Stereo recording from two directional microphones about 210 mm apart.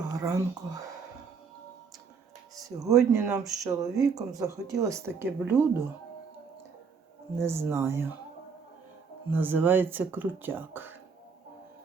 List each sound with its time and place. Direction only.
0.1 s whispering: 15° right (ahead or behind)
2.6 s speech: 15° right (ahead or behind)
7.4 s speech: 10° right (ahead or behind)
9.3 s speech: 10° right (ahead or behind)